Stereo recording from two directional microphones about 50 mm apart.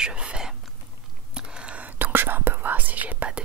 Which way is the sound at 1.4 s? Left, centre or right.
Centre.